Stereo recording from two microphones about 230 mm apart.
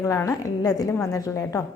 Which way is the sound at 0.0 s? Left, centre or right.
Centre.